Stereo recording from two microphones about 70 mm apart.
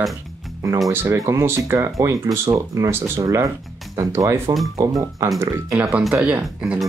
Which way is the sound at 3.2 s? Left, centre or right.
Right.